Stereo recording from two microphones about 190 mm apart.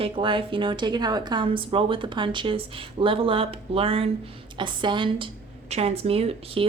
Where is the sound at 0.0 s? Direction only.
25° right (ahead or behind).